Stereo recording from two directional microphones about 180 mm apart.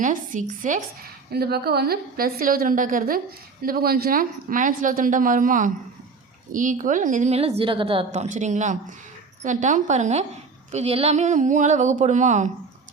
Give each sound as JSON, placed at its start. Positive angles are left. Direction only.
{"t": 0.0, "sound": "a woman's voice", "side_deg": -45}
{"t": 1.3, "sound": "a woman's voice", "side_deg": -60}